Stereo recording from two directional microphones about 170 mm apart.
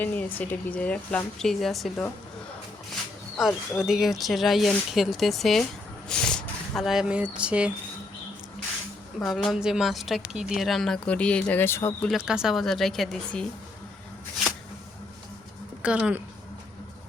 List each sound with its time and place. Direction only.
0.0 s speech: 10° left (ahead or behind)
3.3 s a woman's voice: centre (ahead or behind)
9.2 s a woman's voice: centre (ahead or behind)
12.0 s a woman's voice: 5° right (ahead or behind)
15.8 s speech: 5° right (ahead or behind)